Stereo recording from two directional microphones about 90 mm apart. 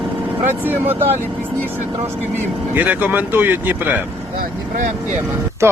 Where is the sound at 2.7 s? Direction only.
20° right (ahead or behind).